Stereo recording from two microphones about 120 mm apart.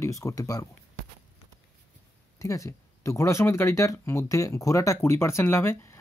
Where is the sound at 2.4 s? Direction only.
25° left (ahead or behind).